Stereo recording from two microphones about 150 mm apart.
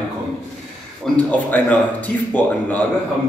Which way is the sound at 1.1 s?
10° left (ahead or behind).